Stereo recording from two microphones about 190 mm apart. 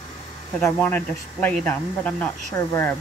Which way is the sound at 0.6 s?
10° left (ahead or behind).